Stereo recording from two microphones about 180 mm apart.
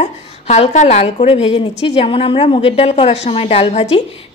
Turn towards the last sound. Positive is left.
turn(degrees=35)  # may be behind; listen again after turning